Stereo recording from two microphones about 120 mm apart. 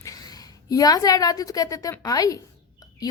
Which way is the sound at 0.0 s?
30° left (ahead or behind).